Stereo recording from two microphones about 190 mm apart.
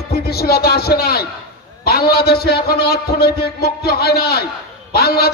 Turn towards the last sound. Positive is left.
turn(degrees=55)  # may be behind; listen again after turning